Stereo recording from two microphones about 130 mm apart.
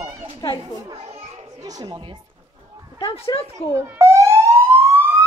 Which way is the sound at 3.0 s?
40° left (ahead or behind).